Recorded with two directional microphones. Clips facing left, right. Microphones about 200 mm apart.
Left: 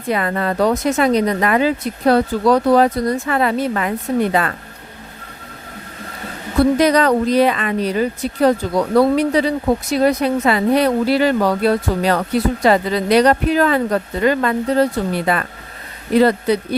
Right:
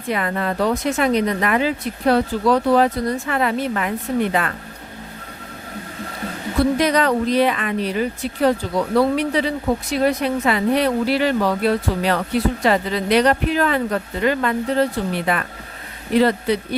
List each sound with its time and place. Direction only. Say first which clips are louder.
0.1 s speech: left 3 dB; 40° left (ahead or behind)
6.7 s speech: left 4 dB; 40° left (ahead or behind)